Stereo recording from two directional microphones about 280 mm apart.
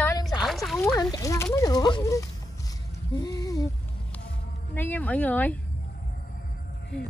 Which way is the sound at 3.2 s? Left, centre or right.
Centre.